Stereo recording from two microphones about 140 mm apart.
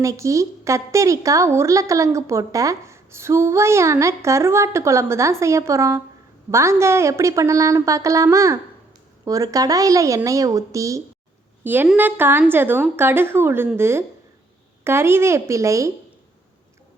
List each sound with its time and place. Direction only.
0.0 s a woman's voice: 20° right (ahead or behind)